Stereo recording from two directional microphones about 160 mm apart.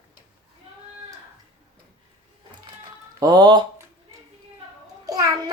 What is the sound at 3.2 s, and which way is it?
Speech, 25° right (ahead or behind).